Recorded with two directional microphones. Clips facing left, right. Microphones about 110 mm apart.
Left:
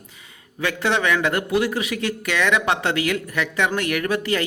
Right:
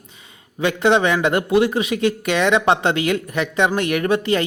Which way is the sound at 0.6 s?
20° right (ahead or behind).